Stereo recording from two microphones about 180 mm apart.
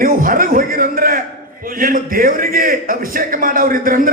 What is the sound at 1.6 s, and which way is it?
Speech, 50° right (ahead or behind).